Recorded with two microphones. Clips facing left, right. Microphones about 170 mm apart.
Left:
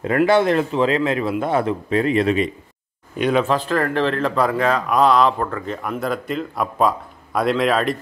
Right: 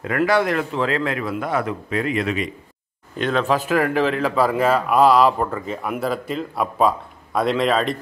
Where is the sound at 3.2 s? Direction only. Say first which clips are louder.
Left 3 dB; 10° left (ahead or behind).